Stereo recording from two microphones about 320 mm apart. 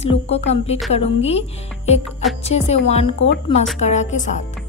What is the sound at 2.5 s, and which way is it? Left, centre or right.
A woman's voice, centre.